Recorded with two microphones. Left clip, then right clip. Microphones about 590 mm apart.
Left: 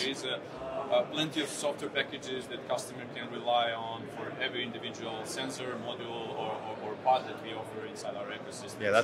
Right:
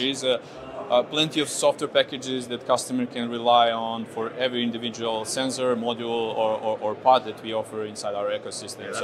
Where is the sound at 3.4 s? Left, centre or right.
Right.